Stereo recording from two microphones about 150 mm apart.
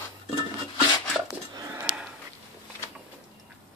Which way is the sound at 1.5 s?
20° right (ahead or behind).